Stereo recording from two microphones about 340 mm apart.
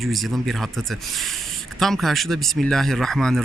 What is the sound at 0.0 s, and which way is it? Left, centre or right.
Speech, centre.